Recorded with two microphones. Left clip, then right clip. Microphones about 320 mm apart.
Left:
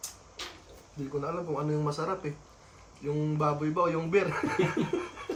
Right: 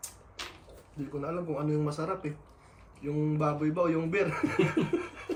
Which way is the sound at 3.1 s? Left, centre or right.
Centre.